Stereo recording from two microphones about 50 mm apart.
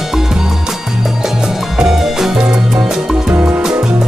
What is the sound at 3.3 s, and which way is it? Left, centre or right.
Music, right.